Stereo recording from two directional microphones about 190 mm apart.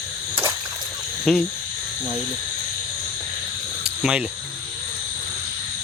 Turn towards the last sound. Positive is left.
turn(degrees=-5)  # may be behind; listen again after turning